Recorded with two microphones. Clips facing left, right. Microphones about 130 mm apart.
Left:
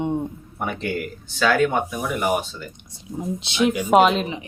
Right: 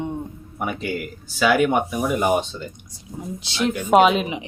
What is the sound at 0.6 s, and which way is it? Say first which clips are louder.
Speech: even; 5° right (ahead or behind).